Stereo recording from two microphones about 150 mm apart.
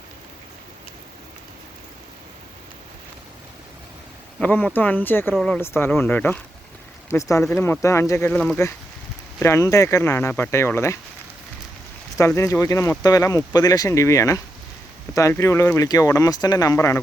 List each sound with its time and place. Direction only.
4.4 s speech: 10° left (ahead or behind)
5.5 s speech: 15° left (ahead or behind)
12.1 s speech: 20° left (ahead or behind)